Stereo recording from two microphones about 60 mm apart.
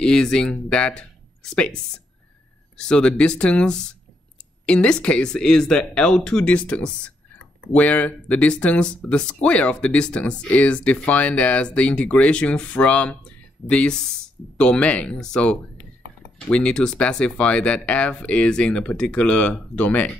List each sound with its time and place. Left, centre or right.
0.0 s speech: centre
2.8 s speech: centre